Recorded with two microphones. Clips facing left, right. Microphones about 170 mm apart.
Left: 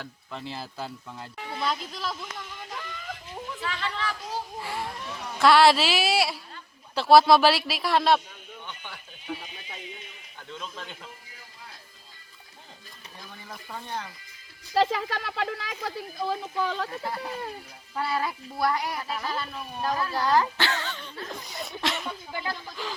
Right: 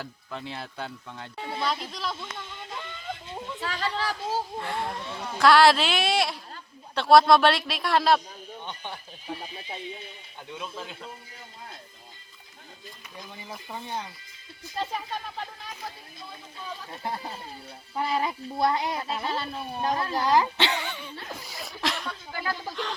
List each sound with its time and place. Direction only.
0.0 s a man's voice: centre (ahead or behind)
2.1 s a sound: 25° right (ahead or behind)
3.6 s speech: 40° right (ahead or behind)
4.6 s a man's voice: 5° left (ahead or behind)
8.8 s speech: 30° right (ahead or behind)
10.5 s a child's voice: 10° right (ahead or behind)
13.1 s a woman's voice: 15° right (ahead or behind)
14.7 s speech: 90° left
17.0 s a woman's voice: 25° right (ahead or behind)
20.1 s a child's voice: 15° right (ahead or behind); by 22.1 s centre (ahead or behind)
22.3 s speech: 20° left (ahead or behind)
22.7 s a man's voice: 5° left (ahead or behind)